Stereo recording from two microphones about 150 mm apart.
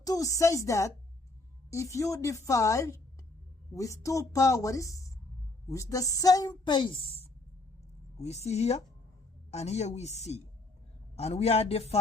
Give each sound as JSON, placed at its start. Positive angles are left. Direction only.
{"t": 0.0, "sound": "a woman's voice", "side_deg": 25}
{"t": 8.2, "sound": "speech", "side_deg": 45}